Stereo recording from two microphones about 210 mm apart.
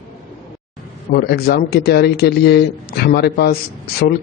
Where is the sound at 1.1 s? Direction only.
50° left (ahead or behind).